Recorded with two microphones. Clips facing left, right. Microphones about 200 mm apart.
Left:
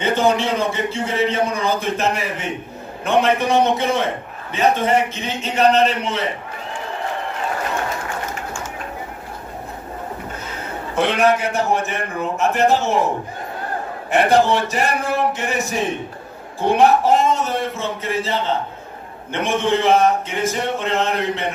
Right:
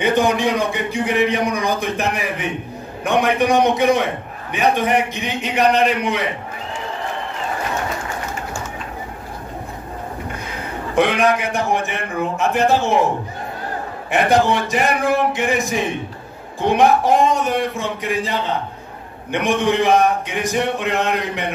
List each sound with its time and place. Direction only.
0.0 s a man's voice: 15° right (ahead or behind)
11.0 s a man's voice: 15° right (ahead or behind)
14.3 s a man's voice: 15° right (ahead or behind)